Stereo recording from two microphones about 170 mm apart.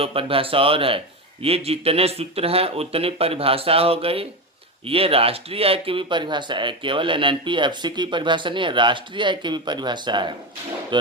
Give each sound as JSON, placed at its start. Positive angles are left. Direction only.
{"t": 0.0, "sound": "a man's voice", "side_deg": -35}